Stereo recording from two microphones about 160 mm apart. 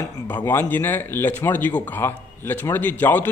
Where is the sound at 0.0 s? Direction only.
15° left (ahead or behind).